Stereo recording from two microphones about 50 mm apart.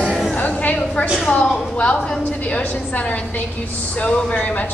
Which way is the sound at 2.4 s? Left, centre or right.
Left.